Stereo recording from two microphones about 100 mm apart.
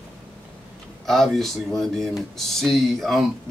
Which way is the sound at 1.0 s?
5° left (ahead or behind).